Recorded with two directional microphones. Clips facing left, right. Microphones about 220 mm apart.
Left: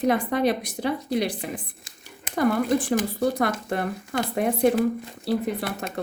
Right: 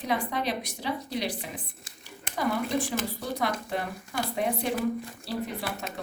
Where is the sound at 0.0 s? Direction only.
50° left (ahead or behind).